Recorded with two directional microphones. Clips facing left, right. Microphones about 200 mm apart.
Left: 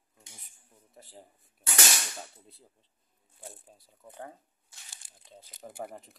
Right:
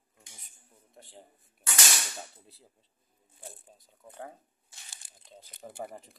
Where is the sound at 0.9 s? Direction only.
5° left (ahead or behind).